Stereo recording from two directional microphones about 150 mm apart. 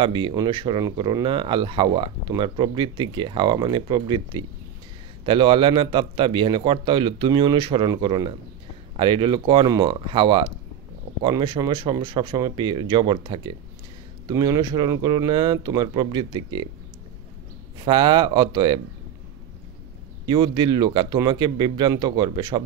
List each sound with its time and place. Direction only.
0.0 s speech: 35° right (ahead or behind)
17.8 s speech: 30° right (ahead or behind)
20.2 s speech: 30° right (ahead or behind)